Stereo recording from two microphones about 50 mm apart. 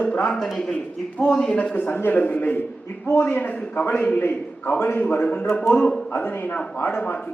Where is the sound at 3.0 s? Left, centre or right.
Left.